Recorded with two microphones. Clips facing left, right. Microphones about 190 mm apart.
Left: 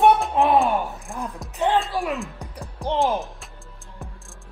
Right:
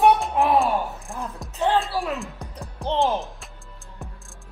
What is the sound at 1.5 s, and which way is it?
Speech, 15° left (ahead or behind).